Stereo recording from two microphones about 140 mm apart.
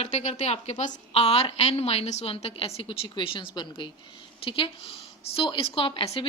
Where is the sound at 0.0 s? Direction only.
55° left (ahead or behind).